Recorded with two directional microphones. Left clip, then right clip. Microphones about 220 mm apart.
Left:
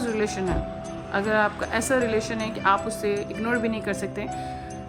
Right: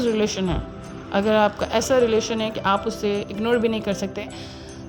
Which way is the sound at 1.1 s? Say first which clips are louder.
Right 4 dB; 40° right (ahead or behind).